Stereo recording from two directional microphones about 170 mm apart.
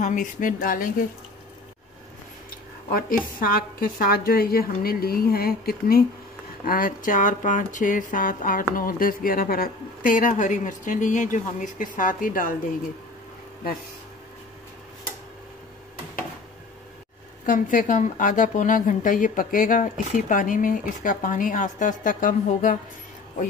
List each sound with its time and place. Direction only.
0.0 s a woman's voice: 50° left (ahead or behind)
2.9 s a woman's voice: 55° left (ahead or behind)
17.5 s a woman's voice: 50° left (ahead or behind)